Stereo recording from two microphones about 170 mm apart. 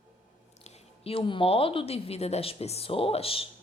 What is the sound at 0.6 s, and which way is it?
A woman's voice, 35° left (ahead or behind).